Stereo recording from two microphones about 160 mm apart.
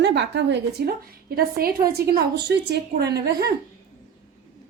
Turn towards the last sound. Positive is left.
turn(degrees=-90)